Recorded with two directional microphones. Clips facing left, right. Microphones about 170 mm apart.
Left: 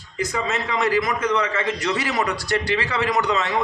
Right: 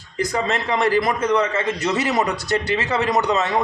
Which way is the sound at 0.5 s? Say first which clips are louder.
Right 2 dB; 35° right (ahead or behind).